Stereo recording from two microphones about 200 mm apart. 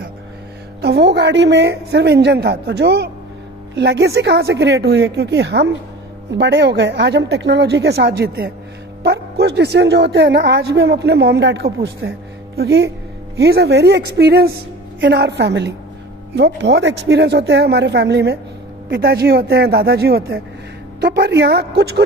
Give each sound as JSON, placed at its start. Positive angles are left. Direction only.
{"t": 0.7, "sound": "a woman's voice", "side_deg": -55}